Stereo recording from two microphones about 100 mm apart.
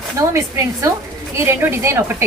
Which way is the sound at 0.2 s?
35° right (ahead or behind).